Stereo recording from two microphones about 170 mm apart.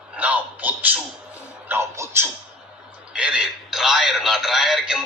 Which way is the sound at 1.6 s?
15° right (ahead or behind).